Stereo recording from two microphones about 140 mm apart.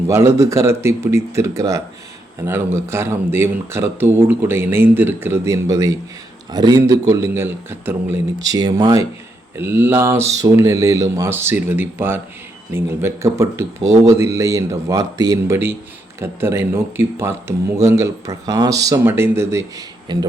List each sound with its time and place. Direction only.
0.1 s speech: 20° right (ahead or behind)
9.6 s speech: 15° right (ahead or behind)
20.1 s speech: 30° right (ahead or behind)